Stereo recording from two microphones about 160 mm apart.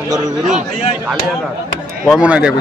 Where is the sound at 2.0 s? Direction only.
5° right (ahead or behind).